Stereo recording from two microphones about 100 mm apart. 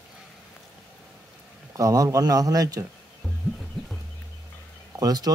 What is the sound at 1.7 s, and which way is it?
Speech, 35° right (ahead or behind).